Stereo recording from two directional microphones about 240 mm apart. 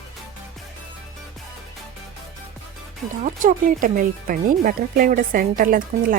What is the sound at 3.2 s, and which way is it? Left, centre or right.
Speech, right.